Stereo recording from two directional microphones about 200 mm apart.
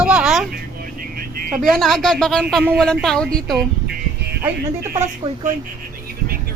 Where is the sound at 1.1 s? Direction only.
45° right (ahead or behind).